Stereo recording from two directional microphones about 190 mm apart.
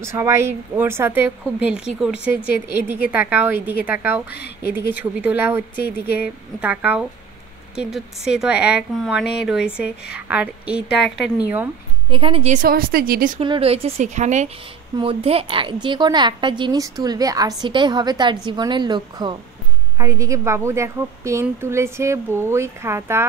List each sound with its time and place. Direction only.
0.0 s a woman's voice: 15° right (ahead or behind)
12.1 s a woman's voice: 30° right (ahead or behind)
12.5 s speech: 50° right (ahead or behind)
13.4 s a woman's voice: 30° right (ahead or behind); by 23.2 s 15° right (ahead or behind)